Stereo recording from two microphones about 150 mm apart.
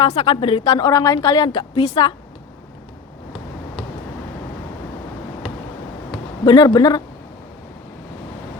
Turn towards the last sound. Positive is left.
turn(degrees=25)  # may be behind; listen again after turning